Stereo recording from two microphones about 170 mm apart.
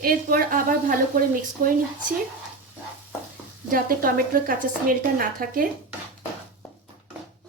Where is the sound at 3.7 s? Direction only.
55° right (ahead or behind).